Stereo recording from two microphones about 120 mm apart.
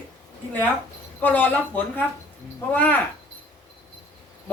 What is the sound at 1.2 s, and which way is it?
Speech, 15° left (ahead or behind).